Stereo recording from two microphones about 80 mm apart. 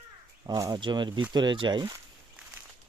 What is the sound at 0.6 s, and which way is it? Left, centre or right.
Speech, right.